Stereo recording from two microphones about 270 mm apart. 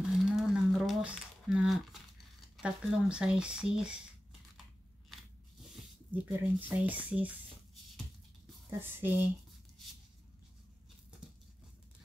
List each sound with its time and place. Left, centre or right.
0.1 s crumpling: centre
2.5 s speech: centre
6.2 s speech: centre
8.6 s speech: centre